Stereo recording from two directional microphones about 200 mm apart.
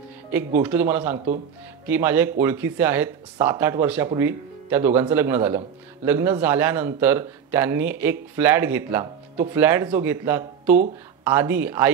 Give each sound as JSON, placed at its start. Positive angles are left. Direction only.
{"t": 0.6, "sound": "speech", "side_deg": -10}